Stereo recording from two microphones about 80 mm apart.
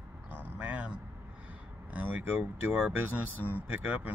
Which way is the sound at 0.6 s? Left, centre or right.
Centre.